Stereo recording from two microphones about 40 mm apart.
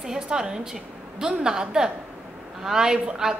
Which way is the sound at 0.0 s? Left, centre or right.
Centre.